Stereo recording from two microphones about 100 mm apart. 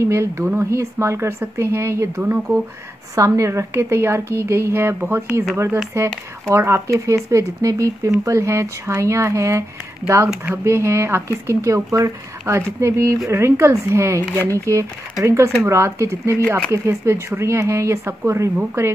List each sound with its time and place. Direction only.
0.0 s speech: 30° right (ahead or behind)